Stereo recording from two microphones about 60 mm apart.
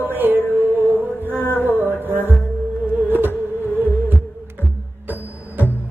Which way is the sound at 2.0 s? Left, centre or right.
Right.